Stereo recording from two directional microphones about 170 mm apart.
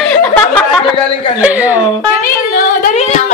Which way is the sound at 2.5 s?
55° left (ahead or behind).